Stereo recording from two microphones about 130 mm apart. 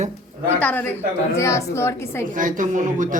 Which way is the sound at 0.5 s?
15° left (ahead or behind).